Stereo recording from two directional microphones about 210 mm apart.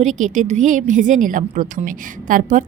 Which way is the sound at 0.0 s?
35° right (ahead or behind).